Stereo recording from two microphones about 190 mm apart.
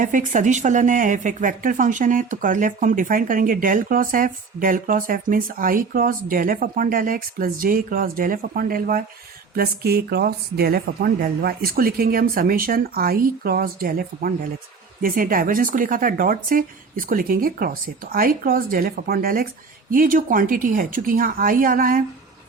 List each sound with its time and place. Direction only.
0.0 s speech: 45° right (ahead or behind)